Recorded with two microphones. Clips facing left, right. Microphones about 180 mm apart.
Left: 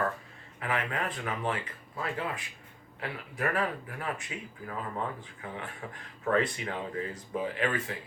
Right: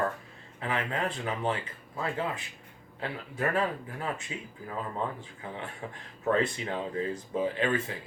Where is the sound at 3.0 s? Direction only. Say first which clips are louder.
Right 2 dB; 25° right (ahead or behind).